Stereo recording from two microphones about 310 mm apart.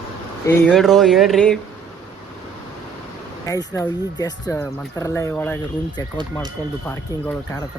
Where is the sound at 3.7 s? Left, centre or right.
Centre.